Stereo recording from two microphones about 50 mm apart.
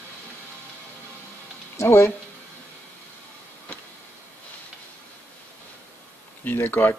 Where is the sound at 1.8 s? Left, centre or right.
Left.